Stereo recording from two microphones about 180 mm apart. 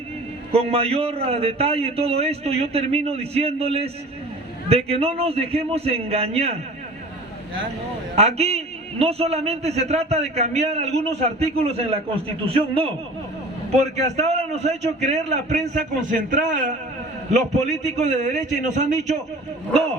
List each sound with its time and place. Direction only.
0.5 s a man's voice: 35° right (ahead or behind)
8.1 s a man's voice: 35° right (ahead or behind)
14.0 s a man's voice: 40° right (ahead or behind)
17.8 s a man's voice: 40° right (ahead or behind)